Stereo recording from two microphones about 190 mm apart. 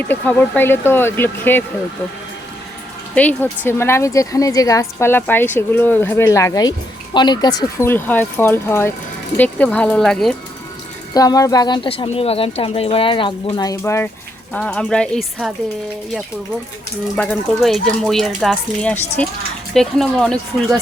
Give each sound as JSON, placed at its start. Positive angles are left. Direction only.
{"t": 0.0, "sound": "a woman's voice", "side_deg": 10}
{"t": 3.2, "sound": "a woman's voice", "side_deg": 10}
{"t": 11.1, "sound": "speech", "side_deg": 20}
{"t": 17.2, "sound": "speech", "side_deg": 0}